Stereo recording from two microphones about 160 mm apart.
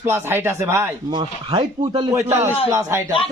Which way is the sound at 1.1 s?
30° right (ahead or behind).